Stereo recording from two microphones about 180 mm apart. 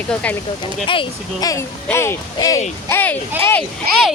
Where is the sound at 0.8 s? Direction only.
30° left (ahead or behind); by 3.6 s 15° left (ahead or behind).